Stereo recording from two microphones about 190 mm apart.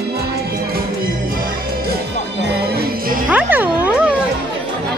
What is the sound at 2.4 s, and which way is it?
Music, 55° right (ahead or behind).